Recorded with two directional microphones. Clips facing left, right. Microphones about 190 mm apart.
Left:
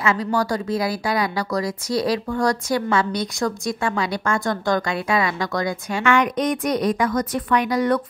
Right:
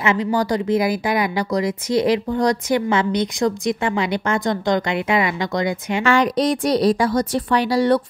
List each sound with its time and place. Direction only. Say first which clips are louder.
0.0 s speech: right 2 dB; 20° right (ahead or behind)
6.0 s a woman's voice: right 2 dB; 35° right (ahead or behind)